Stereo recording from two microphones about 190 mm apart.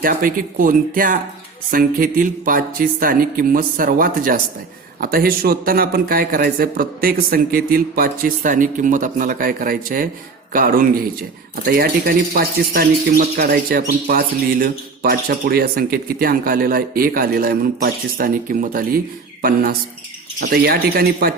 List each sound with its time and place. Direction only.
0.0 s speech: 50° right (ahead or behind)